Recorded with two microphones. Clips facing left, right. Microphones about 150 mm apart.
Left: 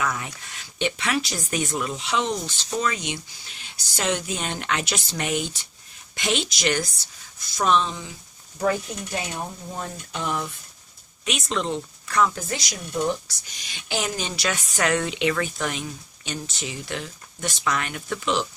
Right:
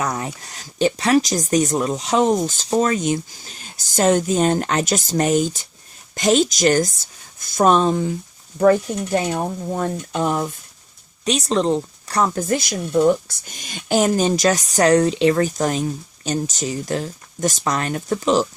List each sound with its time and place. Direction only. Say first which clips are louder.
0.0 s speech: right 4 dB; 40° right (ahead or behind)